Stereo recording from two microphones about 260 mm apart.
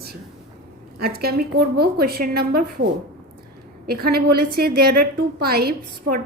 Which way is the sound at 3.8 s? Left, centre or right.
Right.